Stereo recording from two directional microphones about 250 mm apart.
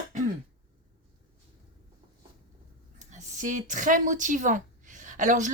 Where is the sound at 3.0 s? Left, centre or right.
Right.